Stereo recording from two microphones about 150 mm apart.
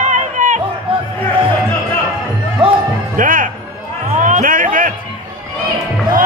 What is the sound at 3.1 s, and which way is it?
Music, 65° right (ahead or behind).